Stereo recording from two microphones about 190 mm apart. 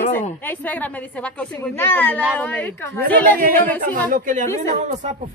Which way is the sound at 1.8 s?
10° left (ahead or behind).